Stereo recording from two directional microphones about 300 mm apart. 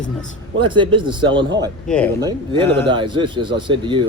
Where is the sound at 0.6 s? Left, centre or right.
Centre.